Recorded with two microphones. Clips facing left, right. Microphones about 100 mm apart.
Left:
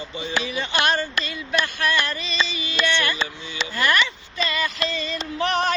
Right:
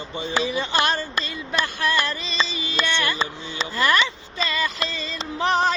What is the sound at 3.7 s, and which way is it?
Speech, 30° right (ahead or behind).